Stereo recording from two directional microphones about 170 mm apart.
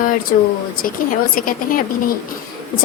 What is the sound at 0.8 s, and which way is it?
A woman's voice, 55° left (ahead or behind).